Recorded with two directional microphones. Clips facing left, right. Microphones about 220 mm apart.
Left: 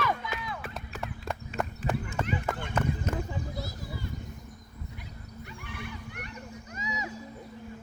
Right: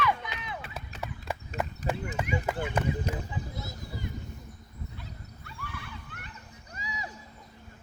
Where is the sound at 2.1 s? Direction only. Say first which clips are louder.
Right 1 dB; 10° right (ahead or behind).